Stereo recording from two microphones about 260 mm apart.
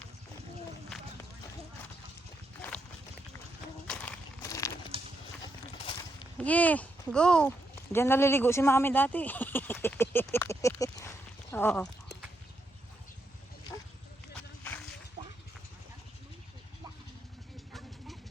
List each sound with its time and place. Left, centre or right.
2.6 s boat: centre
3.8 s horse: centre
4.9 s clip-clop: right
5.4 s clip-clop: centre
6.3 s speech: centre
11.5 s a sound: centre
14.3 s vehicle: centre